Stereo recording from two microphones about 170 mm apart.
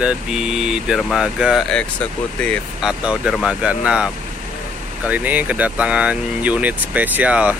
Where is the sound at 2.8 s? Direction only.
5° right (ahead or behind).